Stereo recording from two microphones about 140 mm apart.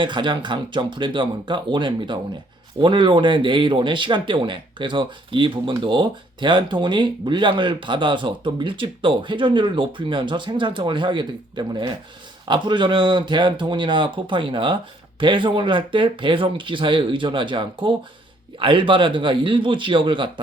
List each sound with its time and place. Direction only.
0.0 s speech: 35° right (ahead or behind)